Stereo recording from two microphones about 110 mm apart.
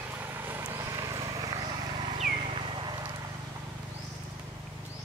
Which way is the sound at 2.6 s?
45° right (ahead or behind).